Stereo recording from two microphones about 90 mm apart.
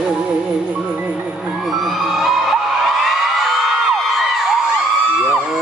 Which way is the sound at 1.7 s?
Centre (ahead or behind).